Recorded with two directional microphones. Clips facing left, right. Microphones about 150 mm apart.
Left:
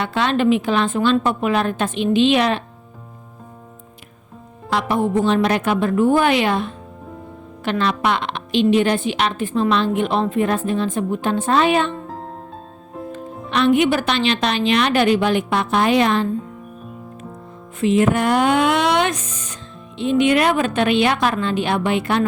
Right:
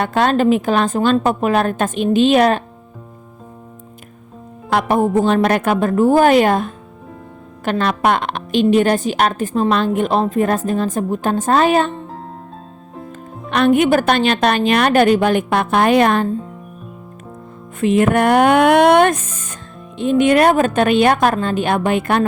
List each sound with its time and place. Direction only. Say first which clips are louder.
0.0 s a woman's voice: right 3 dB; 45° right (ahead or behind)
4.7 s a woman's voice: right 4 dB; 50° right (ahead or behind)
13.1 s a woman's voice: right 3 dB; 50° right (ahead or behind)
17.7 s a woman's voice: right 2 dB; 55° right (ahead or behind)